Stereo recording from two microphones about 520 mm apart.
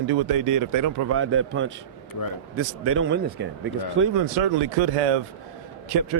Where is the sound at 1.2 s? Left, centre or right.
Right.